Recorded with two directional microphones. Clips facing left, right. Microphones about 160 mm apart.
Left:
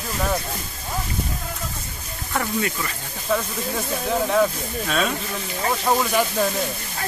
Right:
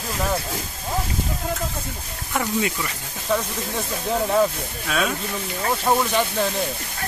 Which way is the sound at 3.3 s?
Centre (ahead or behind).